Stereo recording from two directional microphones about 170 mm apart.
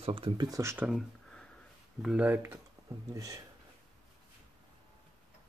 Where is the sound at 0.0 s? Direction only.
30° right (ahead or behind).